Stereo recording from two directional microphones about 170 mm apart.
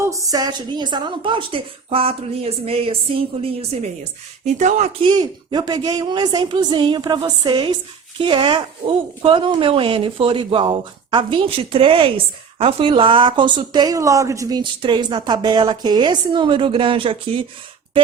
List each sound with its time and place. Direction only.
0.0 s a woman's voice: 20° right (ahead or behind); by 4.9 s 45° right (ahead or behind)
5.0 s speech: 25° right (ahead or behind)